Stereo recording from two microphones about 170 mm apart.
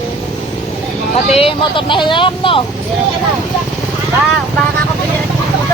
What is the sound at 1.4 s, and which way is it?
Speech, 30° left (ahead or behind).